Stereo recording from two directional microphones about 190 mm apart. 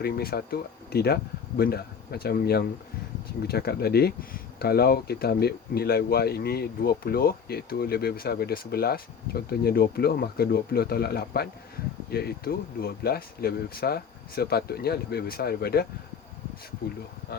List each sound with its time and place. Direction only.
0.0 s speech: 55° left (ahead or behind)